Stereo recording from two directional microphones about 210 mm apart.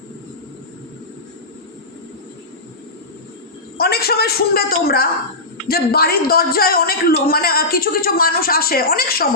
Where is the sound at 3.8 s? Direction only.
50° left (ahead or behind).